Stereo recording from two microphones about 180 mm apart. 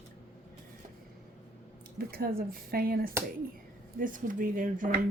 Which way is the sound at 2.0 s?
55° right (ahead or behind).